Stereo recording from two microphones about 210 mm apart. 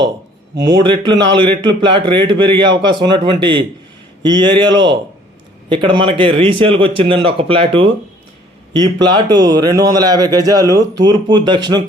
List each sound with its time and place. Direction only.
0.6 s a man's voice: 20° right (ahead or behind)